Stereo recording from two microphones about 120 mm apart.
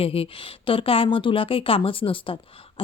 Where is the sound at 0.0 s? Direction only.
50° left (ahead or behind).